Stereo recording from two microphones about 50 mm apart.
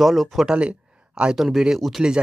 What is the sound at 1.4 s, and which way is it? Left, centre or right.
Speech, centre.